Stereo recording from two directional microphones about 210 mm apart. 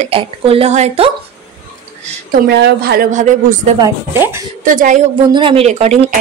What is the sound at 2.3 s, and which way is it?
A woman's voice, 50° right (ahead or behind).